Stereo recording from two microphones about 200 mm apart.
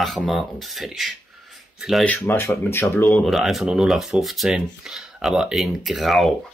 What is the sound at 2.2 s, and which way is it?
Speech, 10° left (ahead or behind).